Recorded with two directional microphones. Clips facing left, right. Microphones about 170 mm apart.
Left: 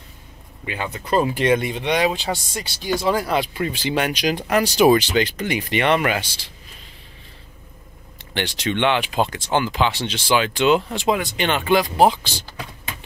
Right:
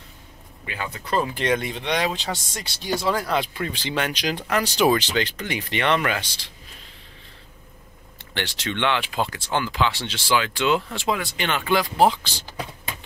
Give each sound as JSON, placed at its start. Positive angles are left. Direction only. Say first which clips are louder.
{"t": 0.7, "sound": "speech", "louder": "left 4 dB", "side_deg": 20}
{"t": 8.4, "sound": "speech", "louder": "left 5 dB", "side_deg": 15}